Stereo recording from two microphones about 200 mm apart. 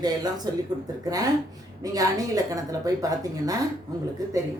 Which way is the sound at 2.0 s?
15° right (ahead or behind).